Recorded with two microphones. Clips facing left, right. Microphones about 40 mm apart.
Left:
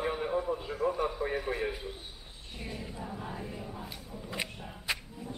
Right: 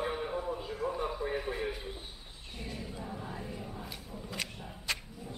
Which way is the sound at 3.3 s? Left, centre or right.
Centre.